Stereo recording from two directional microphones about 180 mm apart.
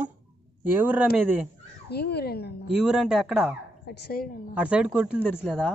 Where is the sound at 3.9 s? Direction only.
60° left (ahead or behind).